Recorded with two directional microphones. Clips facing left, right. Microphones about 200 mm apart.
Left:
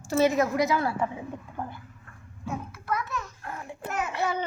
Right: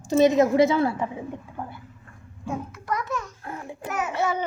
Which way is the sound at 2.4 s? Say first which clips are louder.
Right 3 dB; 15° right (ahead or behind).